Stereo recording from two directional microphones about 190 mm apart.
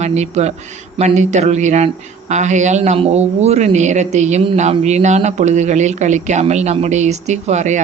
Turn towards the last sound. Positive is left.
turn(degrees=-40)  # may be behind; listen again after turning